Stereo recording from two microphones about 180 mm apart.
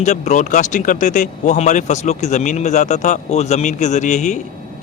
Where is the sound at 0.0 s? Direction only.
40° left (ahead or behind).